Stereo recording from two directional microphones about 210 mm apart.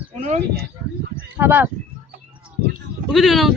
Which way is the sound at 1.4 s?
10° right (ahead or behind).